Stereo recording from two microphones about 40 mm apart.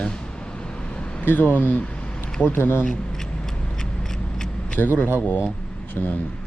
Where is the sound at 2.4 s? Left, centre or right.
Left.